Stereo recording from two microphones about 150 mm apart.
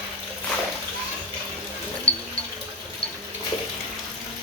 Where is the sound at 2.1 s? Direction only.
35° left (ahead or behind).